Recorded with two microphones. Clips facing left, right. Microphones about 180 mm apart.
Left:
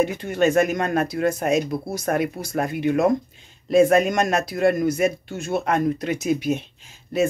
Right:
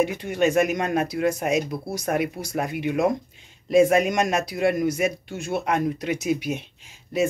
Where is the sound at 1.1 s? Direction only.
5° right (ahead or behind).